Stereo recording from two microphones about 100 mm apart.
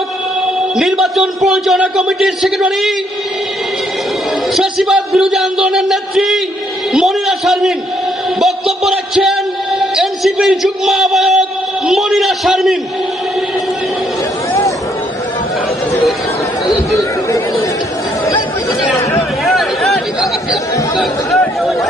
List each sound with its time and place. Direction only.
0.8 s speech: 5° right (ahead or behind)
4.5 s a man's voice: 5° right (ahead or behind)
16.9 s chatter: 30° left (ahead or behind)
19.5 s a sound: centre (ahead or behind)
20.9 s speech: centre (ahead or behind)
21.6 s a sound: centre (ahead or behind)